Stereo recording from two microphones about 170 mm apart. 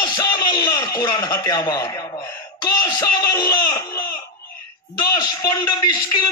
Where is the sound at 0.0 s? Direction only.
25° left (ahead or behind).